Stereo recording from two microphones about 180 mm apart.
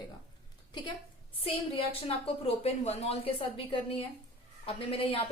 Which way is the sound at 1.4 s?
30° left (ahead or behind).